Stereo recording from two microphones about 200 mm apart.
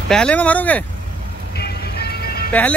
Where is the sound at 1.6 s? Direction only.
50° left (ahead or behind).